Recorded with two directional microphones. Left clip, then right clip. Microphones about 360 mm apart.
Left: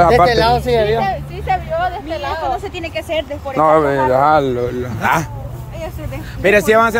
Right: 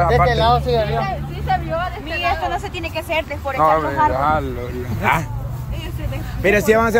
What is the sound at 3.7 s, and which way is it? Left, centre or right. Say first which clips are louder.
Speech: left 4 dB; centre.